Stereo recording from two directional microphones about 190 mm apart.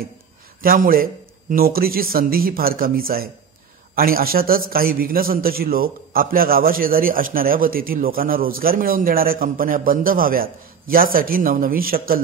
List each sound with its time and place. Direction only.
0.6 s a man's voice: 50° right (ahead or behind)